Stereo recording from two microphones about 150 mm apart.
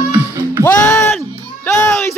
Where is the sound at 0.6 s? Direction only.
15° left (ahead or behind).